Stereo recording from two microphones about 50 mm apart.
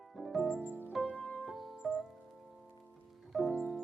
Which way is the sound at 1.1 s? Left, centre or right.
Left.